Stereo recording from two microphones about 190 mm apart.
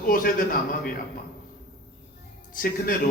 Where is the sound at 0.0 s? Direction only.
50° left (ahead or behind).